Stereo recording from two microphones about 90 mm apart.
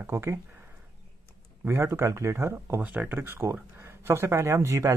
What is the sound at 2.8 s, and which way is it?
Speech, 15° right (ahead or behind).